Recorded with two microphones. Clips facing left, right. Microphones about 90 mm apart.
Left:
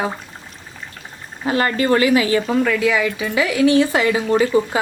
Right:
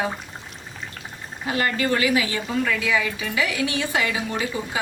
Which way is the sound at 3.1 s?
35° left (ahead or behind).